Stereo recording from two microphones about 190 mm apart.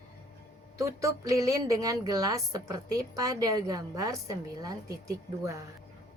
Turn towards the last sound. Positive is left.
turn(degrees=-15)  # may be behind; listen again after turning